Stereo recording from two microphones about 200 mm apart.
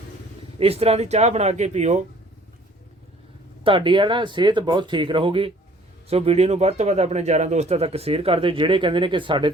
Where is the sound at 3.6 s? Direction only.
25° right (ahead or behind).